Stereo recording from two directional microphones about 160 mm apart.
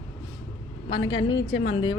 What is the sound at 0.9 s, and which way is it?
A woman's voice, 30° left (ahead or behind).